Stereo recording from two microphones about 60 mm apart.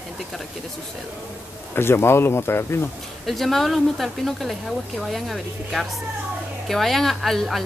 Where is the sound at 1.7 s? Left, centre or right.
Left.